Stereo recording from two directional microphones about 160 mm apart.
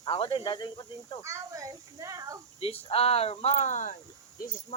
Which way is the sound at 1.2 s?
20° right (ahead or behind).